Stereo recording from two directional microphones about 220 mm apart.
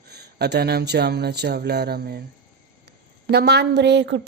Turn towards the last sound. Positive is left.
turn(degrees=-50)  # may be behind; listen again after turning